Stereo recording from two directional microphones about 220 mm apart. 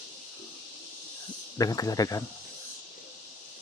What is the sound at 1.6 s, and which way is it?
Speech, 15° left (ahead or behind).